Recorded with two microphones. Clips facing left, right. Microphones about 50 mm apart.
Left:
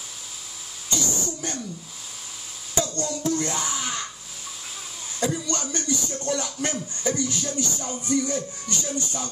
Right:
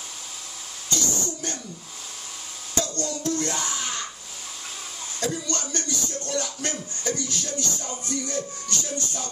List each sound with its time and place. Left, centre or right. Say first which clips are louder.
0.8 s a sound: even; centre
2.7 s speech: left 1 dB; centre
5.2 s speech: left 2 dB; centre